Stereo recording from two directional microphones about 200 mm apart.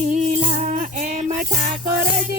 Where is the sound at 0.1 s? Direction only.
40° right (ahead or behind).